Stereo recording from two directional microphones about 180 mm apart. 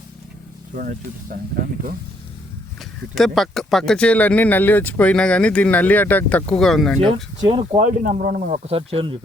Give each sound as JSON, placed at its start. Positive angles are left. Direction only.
{"t": 0.8, "sound": "speech", "side_deg": -50}
{"t": 3.2, "sound": "speech", "side_deg": 0}
{"t": 7.1, "sound": "speech", "side_deg": -30}
{"t": 7.8, "sound": "speech", "side_deg": -45}